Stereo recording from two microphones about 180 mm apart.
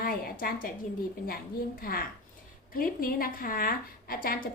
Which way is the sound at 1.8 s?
55° left (ahead or behind).